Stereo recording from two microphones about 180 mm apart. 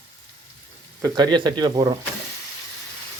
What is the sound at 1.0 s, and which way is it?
Speech, 25° right (ahead or behind).